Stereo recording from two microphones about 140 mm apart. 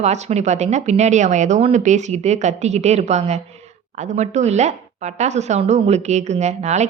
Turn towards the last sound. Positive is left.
turn(degrees=-55)  # may be behind; listen again after turning